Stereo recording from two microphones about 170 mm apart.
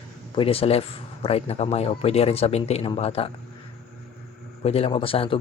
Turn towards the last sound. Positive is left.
turn(degrees=30)  # may be behind; listen again after turning